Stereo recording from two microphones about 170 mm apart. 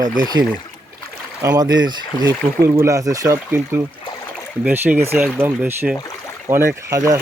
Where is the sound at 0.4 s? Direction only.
10° right (ahead or behind).